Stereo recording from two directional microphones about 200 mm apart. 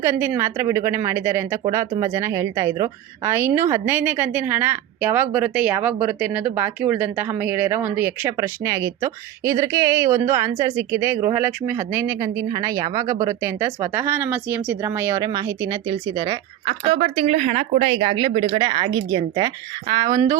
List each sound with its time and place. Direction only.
0.0 s a woman's voice: 10° right (ahead or behind)